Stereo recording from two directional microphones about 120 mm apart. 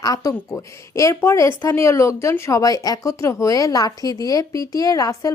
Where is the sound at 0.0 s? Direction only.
30° left (ahead or behind).